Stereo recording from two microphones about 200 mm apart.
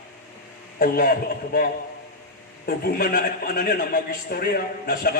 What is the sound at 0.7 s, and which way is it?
A man's voice, 50° left (ahead or behind).